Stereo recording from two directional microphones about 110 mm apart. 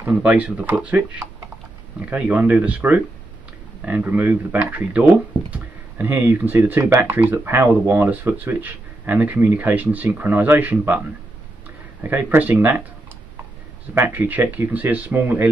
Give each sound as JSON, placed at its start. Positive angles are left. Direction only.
{"t": 0.0, "sound": "speech", "side_deg": -15}
{"t": 12.0, "sound": "speech", "side_deg": -20}
{"t": 13.9, "sound": "speech", "side_deg": -15}